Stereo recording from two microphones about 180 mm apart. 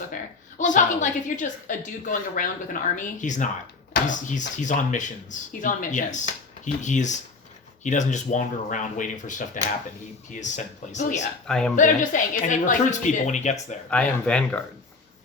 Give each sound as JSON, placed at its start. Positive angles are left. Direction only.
{"t": 0.6, "sound": "speech", "side_deg": 45}
{"t": 11.4, "sound": "speech", "side_deg": 5}
{"t": 11.8, "sound": "speech", "side_deg": 45}
{"t": 13.9, "sound": "speech", "side_deg": 5}